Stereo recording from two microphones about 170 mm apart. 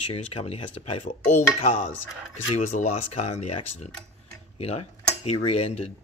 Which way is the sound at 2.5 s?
45° left (ahead or behind).